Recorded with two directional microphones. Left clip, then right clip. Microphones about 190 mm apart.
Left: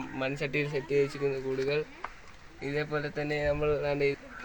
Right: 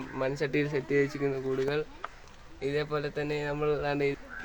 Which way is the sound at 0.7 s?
40° right (ahead or behind).